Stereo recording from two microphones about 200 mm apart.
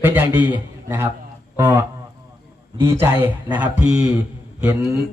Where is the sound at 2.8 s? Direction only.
10° right (ahead or behind).